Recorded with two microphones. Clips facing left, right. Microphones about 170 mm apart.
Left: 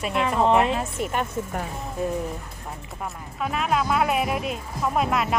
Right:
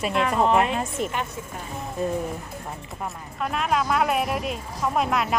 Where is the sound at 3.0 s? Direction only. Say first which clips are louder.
Even; centre (ahead or behind).